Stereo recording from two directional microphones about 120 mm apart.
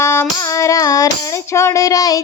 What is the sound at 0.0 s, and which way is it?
Child singing, 20° left (ahead or behind).